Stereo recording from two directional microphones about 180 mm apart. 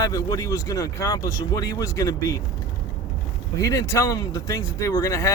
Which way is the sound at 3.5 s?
20° left (ahead or behind).